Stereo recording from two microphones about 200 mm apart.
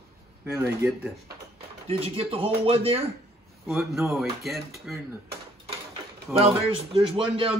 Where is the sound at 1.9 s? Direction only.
30° right (ahead or behind).